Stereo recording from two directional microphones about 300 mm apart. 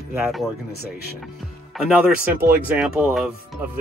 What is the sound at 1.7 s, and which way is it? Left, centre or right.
Speech, centre.